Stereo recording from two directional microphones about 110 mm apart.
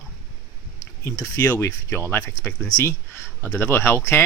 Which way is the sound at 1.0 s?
30° left (ahead or behind).